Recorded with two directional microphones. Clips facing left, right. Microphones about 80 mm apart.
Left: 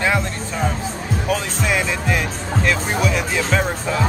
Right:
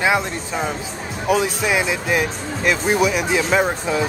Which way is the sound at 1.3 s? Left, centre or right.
Centre.